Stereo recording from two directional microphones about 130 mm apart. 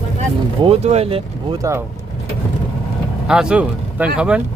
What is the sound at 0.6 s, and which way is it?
Speech, 50° right (ahead or behind).